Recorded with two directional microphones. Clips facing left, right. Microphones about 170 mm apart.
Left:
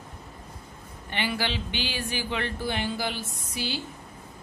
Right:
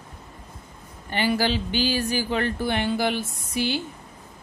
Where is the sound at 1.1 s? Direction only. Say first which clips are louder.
Right 6 dB; 40° right (ahead or behind).